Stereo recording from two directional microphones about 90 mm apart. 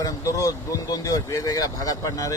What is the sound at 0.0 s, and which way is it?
Speech, 40° left (ahead or behind).